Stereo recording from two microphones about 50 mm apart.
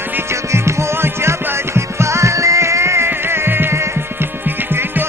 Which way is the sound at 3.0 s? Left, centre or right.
Right.